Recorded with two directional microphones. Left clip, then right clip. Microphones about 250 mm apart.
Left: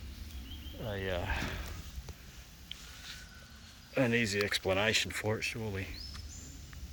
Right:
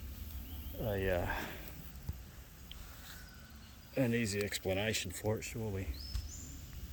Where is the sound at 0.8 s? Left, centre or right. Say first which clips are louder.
Right 2 dB; centre.